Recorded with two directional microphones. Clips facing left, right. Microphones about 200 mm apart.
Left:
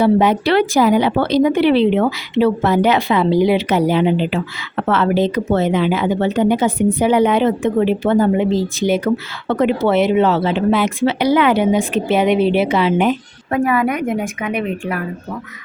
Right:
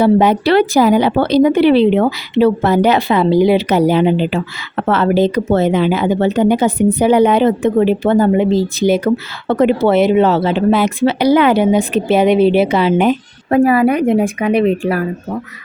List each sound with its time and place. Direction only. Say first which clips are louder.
0.0 s speech: right 2 dB; 40° right (ahead or behind)